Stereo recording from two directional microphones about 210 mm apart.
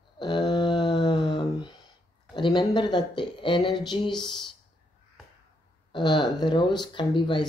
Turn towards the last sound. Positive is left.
turn(degrees=25)  # may be behind; listen again after turning